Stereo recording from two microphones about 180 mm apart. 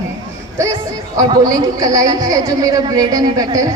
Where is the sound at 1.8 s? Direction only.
20° right (ahead or behind).